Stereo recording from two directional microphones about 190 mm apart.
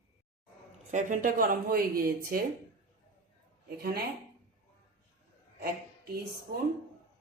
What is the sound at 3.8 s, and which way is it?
Speech, 55° right (ahead or behind).